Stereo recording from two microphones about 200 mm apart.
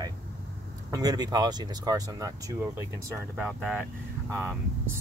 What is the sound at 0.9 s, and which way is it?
Speech, 20° right (ahead or behind).